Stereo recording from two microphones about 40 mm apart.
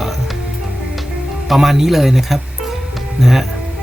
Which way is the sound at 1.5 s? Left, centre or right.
Centre.